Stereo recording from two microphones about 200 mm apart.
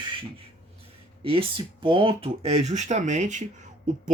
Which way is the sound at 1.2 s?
25° right (ahead or behind).